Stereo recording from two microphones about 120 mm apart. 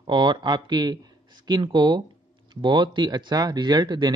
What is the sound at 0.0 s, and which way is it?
Speech, 40° right (ahead or behind).